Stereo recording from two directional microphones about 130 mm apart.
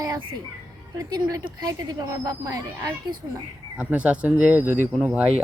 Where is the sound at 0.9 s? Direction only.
30° right (ahead or behind).